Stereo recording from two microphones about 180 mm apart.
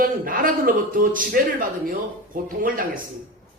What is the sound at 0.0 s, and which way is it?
A man's voice, 50° right (ahead or behind).